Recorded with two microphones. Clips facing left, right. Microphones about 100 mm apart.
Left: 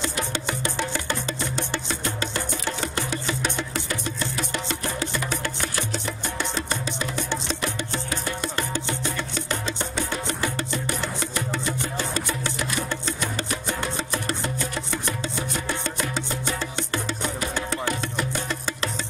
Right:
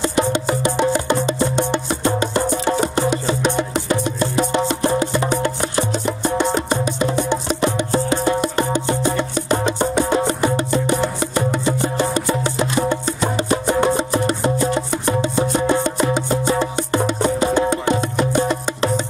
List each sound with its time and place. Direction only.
0.0 s music: 20° right (ahead or behind)